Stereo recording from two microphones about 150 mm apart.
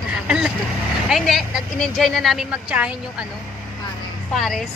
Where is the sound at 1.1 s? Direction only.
Centre (ahead or behind).